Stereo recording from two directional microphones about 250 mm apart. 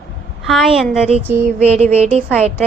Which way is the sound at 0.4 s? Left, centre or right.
Centre.